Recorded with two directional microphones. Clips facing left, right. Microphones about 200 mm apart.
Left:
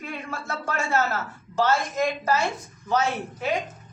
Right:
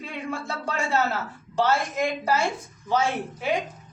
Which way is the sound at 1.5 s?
15° right (ahead or behind).